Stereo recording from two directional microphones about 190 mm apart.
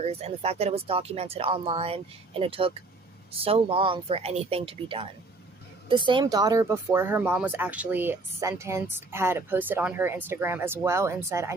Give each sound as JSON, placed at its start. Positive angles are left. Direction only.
{"t": 0.0, "sound": "speech", "side_deg": -35}